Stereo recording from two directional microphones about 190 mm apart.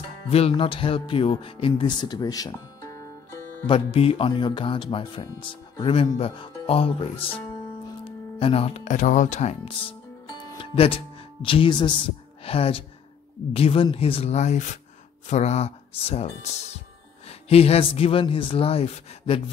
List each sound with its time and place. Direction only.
0.3 s speech: 30° left (ahead or behind)